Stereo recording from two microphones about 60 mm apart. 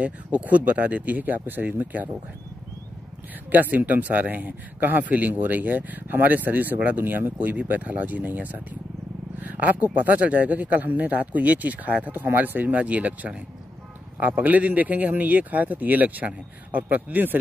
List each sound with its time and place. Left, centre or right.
0.0 s speech: right
3.5 s speech: right